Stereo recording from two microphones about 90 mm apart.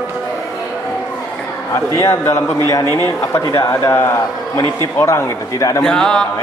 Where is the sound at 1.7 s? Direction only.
30° left (ahead or behind).